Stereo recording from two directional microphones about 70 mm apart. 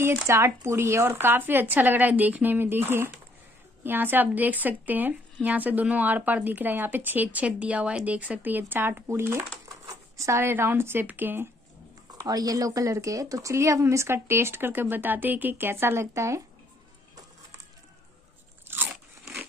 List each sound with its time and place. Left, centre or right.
0.0 s speech: right
9.7 s a sound: right
10.5 s speech: right
12.3 s speech: right
18.7 s crunch: right